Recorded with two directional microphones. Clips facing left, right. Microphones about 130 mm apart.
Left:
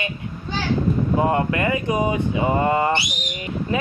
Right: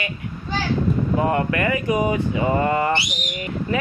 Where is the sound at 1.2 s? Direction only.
25° left (ahead or behind).